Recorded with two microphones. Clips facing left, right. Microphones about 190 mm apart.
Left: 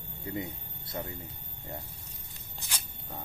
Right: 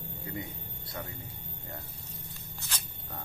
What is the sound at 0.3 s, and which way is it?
Speech, 25° left (ahead or behind).